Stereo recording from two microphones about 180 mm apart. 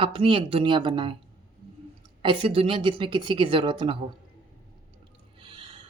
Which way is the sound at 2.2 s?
30° right (ahead or behind).